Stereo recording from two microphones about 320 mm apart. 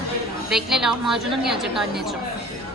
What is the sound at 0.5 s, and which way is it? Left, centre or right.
A woman's voice, centre.